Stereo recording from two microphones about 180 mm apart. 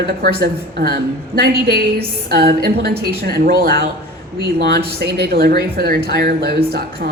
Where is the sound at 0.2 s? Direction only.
60° right (ahead or behind).